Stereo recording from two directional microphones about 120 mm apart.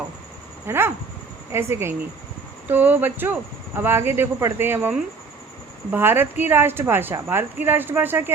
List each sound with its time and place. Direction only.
0.7 s a woman's voice: 20° right (ahead or behind)